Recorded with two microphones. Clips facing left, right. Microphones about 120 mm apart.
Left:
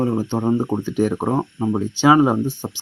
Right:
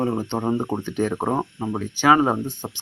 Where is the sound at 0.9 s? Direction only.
5° left (ahead or behind).